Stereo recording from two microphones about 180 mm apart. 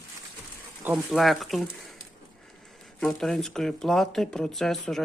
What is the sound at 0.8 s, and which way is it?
Speech, 5° right (ahead or behind).